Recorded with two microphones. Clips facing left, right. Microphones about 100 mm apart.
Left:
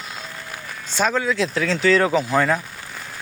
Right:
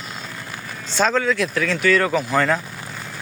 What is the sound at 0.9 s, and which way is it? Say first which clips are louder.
Speech: right 1 dB; 10° left (ahead or behind).